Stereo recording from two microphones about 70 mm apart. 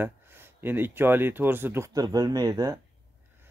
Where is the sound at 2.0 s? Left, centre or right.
Right.